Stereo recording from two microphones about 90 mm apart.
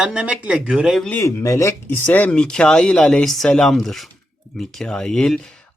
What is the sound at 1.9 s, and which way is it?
Speech, 20° left (ahead or behind).